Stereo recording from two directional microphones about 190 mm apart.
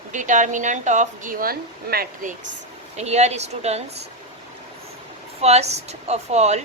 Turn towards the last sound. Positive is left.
turn(degrees=-35)  # may be behind; listen again after turning